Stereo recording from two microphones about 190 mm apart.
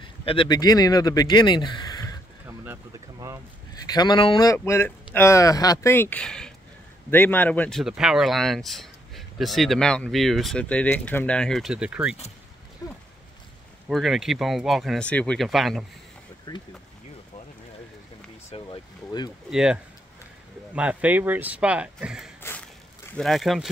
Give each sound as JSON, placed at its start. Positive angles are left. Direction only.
{"t": 0.2, "sound": "speech", "side_deg": 30}
{"t": 2.4, "sound": "boat", "side_deg": -10}
{"t": 3.8, "sound": "speech", "side_deg": 20}
{"t": 4.6, "sound": "speech", "side_deg": 10}
{"t": 7.8, "sound": "speech", "side_deg": -5}
{"t": 13.8, "sound": "speech", "side_deg": 0}
{"t": 16.5, "sound": "speech", "side_deg": 25}
{"t": 18.5, "sound": "a sound", "side_deg": 25}
{"t": 19.5, "sound": "speech", "side_deg": -5}